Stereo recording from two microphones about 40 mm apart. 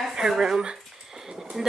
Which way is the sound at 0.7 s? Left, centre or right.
Centre.